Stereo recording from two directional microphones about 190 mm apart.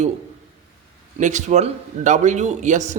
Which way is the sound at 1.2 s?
40° right (ahead or behind).